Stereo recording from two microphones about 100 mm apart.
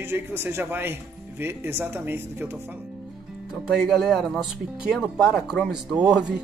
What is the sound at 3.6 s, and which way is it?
Speech, centre (ahead or behind).